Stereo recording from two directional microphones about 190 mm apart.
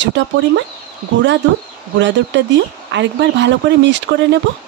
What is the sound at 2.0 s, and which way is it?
Speech, 70° right (ahead or behind).